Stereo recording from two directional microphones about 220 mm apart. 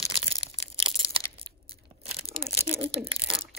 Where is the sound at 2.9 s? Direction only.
25° right (ahead or behind).